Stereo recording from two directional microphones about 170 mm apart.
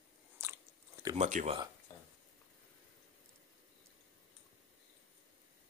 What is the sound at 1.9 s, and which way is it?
Stir, 20° left (ahead or behind).